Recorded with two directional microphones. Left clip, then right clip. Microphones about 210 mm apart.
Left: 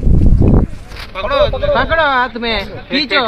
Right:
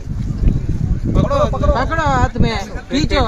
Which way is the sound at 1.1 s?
25° right (ahead or behind).